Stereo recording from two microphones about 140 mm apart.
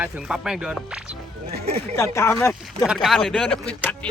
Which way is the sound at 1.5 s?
90° right.